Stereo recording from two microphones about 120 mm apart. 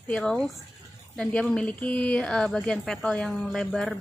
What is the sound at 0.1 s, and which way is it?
Speech, 5° left (ahead or behind).